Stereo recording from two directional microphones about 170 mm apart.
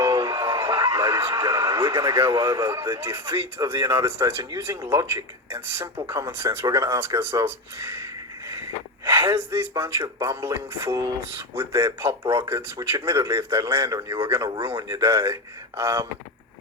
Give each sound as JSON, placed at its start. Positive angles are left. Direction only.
{"t": 0.0, "sound": "a sound", "side_deg": -15}
{"t": 0.9, "sound": "radio", "side_deg": -15}
{"t": 1.3, "sound": "speech", "side_deg": -20}
{"t": 9.0, "sound": "speech", "side_deg": -15}